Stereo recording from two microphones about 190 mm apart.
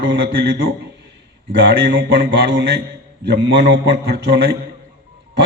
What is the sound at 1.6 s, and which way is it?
A man's voice, 65° right (ahead or behind).